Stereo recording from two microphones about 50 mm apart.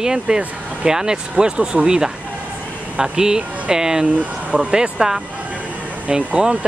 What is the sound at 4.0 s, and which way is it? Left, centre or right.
Speech, right.